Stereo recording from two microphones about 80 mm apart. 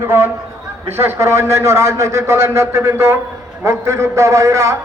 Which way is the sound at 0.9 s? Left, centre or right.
Right.